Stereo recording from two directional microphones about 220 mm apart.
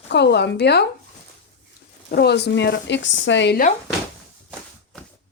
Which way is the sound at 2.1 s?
50° left (ahead or behind).